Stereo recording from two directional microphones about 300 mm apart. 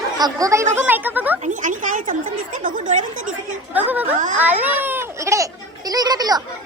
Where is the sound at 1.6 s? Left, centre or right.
Right.